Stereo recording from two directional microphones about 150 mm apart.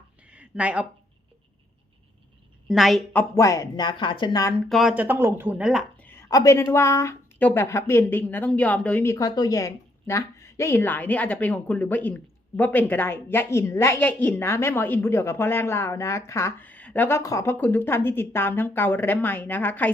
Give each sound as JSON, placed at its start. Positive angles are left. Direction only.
{"t": 0.3, "sound": "a sound", "side_deg": -10}
{"t": 2.6, "sound": "a woman's voice", "side_deg": 0}
{"t": 3.1, "sound": "speech", "side_deg": 15}
{"t": 4.7, "sound": "speech", "side_deg": -5}
{"t": 6.1, "sound": "a woman's voice", "side_deg": 20}
{"t": 9.1, "sound": "a woman's voice", "side_deg": 25}